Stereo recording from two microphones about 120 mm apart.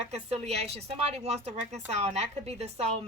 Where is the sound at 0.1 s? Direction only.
60° right (ahead or behind).